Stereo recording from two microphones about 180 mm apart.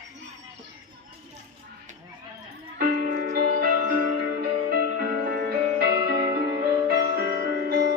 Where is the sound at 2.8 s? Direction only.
55° right (ahead or behind).